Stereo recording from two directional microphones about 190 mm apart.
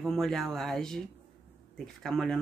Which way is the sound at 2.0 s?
5° left (ahead or behind).